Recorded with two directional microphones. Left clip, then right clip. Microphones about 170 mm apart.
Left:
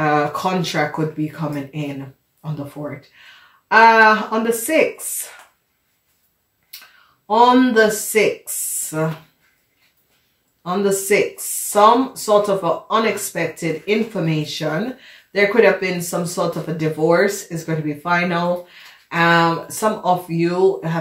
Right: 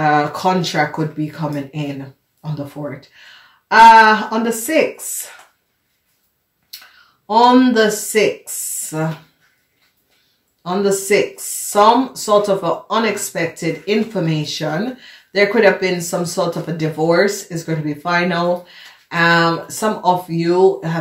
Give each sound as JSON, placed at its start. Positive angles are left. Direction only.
{"t": 0.0, "sound": "speech", "side_deg": -30}
{"t": 7.2, "sound": "speech", "side_deg": -35}
{"t": 10.6, "sound": "speech", "side_deg": -30}
{"t": 12.2, "sound": "speech", "side_deg": -30}